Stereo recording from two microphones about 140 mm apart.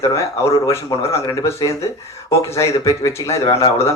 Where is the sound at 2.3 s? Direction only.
20° left (ahead or behind).